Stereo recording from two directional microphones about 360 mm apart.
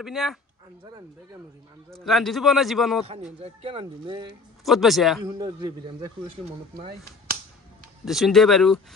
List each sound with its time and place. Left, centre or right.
0.0 s a man's voice: centre
1.9 s a man's voice: centre
3.1 s speech: centre
4.6 s a man's voice: centre
5.2 s speech: centre
8.0 s a man's voice: centre